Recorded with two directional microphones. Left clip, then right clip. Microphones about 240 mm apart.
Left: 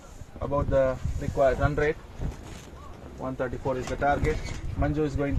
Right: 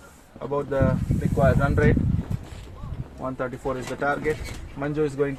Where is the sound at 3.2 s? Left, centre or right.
Right.